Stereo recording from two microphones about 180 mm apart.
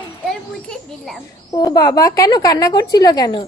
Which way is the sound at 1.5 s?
20° left (ahead or behind).